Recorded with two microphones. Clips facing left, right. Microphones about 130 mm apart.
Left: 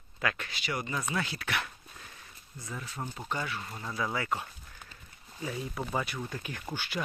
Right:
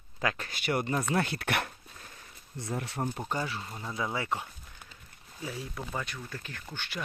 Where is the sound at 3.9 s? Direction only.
25° right (ahead or behind).